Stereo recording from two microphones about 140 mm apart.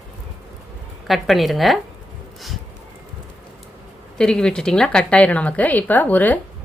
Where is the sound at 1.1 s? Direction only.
Centre (ahead or behind).